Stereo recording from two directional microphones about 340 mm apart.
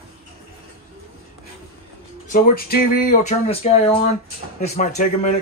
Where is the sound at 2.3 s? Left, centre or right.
Left.